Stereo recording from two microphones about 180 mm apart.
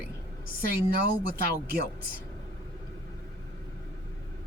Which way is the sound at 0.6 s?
55° right (ahead or behind).